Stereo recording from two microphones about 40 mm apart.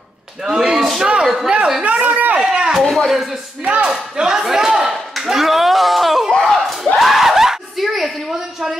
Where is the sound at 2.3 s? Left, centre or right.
Right.